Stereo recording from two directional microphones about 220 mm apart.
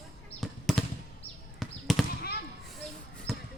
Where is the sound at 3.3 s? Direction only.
Centre (ahead or behind).